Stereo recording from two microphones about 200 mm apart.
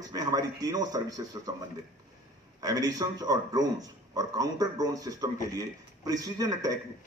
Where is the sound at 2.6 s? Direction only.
20° right (ahead or behind).